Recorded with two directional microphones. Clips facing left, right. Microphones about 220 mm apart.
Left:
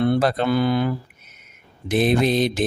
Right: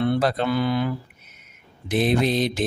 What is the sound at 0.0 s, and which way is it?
Mantra, 45° left (ahead or behind).